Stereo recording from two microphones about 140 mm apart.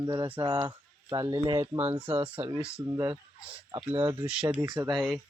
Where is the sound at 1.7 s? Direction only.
15° right (ahead or behind).